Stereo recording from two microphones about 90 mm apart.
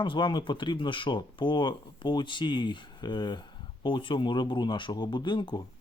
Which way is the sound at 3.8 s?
65° left (ahead or behind).